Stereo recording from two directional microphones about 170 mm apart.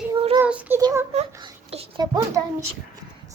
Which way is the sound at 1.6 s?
35° right (ahead or behind).